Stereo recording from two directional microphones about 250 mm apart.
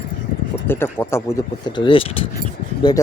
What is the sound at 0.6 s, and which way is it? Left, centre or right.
A man's voice, centre.